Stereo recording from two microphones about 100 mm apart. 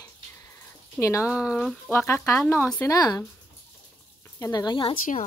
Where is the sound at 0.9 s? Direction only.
30° left (ahead or behind).